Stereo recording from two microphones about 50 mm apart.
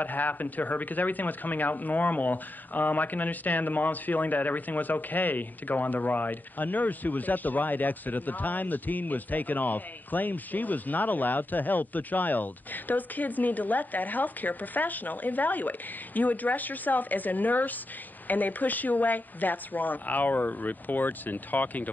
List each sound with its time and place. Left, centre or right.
0.0 s speech: left